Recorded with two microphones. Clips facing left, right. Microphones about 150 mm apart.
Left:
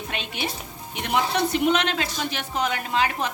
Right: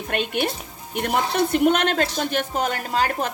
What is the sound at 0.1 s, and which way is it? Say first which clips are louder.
Speech: right 9 dB; 50° right (ahead or behind).